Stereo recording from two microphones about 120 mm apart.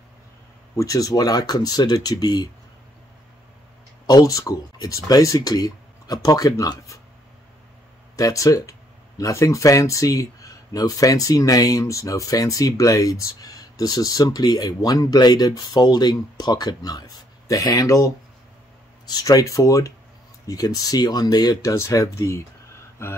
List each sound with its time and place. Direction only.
0.7 s speech: 30° left (ahead or behind)
4.0 s speech: 30° left (ahead or behind)
8.2 s speech: 30° left (ahead or behind)